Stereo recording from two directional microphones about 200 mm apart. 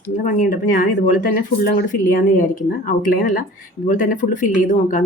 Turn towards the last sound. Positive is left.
turn(degrees=40)  # may be behind; listen again after turning